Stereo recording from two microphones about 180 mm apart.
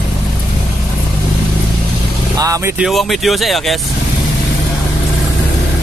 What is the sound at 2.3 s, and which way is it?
Speech, 20° right (ahead or behind).